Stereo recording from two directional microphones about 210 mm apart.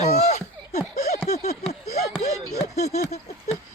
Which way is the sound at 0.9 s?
35° left (ahead or behind).